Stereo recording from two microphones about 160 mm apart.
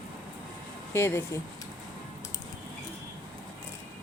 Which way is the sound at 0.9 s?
15° left (ahead or behind).